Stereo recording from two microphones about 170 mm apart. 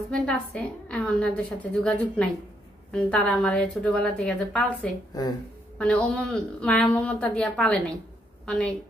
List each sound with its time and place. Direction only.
0.1 s a woman's voice: 5° left (ahead or behind)
5.2 s speech: 20° left (ahead or behind)
5.8 s a woman's voice: 5° left (ahead or behind)